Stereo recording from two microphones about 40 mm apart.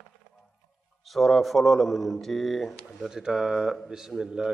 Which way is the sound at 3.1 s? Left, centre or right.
Centre.